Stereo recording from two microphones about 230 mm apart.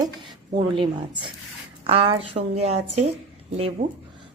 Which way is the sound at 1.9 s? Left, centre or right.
Right.